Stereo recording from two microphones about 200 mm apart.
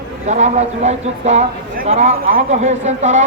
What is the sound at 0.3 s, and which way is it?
Speech, 35° right (ahead or behind).